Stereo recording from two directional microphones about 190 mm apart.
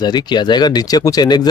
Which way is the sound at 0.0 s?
20° left (ahead or behind).